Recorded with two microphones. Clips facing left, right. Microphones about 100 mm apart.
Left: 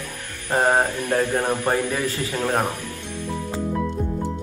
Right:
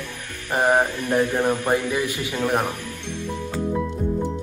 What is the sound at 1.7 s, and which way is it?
Speech, 10° right (ahead or behind).